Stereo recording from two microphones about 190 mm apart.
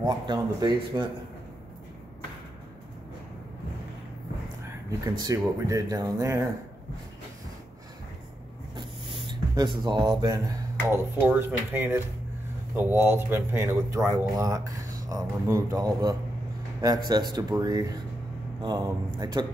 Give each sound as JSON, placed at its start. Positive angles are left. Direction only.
{"t": 0.0, "sound": "speech", "side_deg": -20}
{"t": 5.0, "sound": "speech", "side_deg": -20}
{"t": 8.7, "sound": "a sound", "side_deg": -25}
{"t": 10.9, "sound": "speech", "side_deg": -10}